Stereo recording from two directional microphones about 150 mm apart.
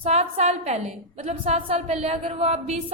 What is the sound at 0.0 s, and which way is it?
A woman's voice, 45° right (ahead or behind).